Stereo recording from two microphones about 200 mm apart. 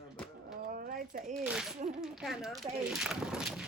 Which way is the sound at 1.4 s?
5° right (ahead or behind).